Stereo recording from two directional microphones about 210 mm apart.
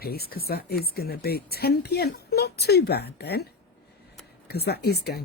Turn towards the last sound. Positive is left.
turn(degrees=50)  # may be behind; listen again after turning